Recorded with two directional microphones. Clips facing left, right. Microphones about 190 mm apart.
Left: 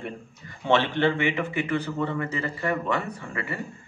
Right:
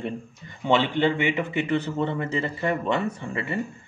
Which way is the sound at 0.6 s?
15° right (ahead or behind).